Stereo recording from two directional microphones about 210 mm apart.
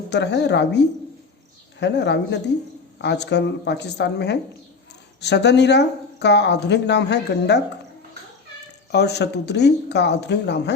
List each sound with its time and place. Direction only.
0.1 s a woman's voice: 55° left (ahead or behind)
8.9 s speech: 50° left (ahead or behind)